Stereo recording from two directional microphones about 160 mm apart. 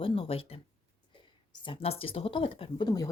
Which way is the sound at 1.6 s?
35° left (ahead or behind).